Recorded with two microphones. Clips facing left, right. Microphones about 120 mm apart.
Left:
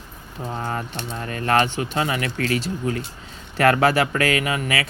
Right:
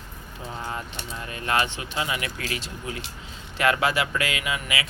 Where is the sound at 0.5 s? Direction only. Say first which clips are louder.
Left 5 dB; 40° left (ahead or behind).